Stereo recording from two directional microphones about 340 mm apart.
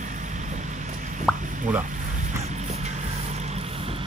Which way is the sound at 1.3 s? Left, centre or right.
Centre.